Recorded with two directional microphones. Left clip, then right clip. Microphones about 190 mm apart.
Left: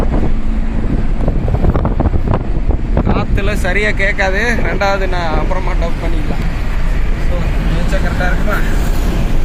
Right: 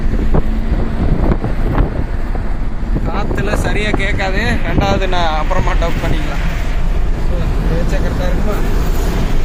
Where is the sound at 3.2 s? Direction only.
35° left (ahead or behind).